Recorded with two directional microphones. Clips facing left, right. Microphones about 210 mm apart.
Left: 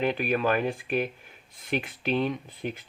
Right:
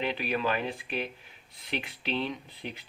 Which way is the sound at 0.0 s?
50° left (ahead or behind).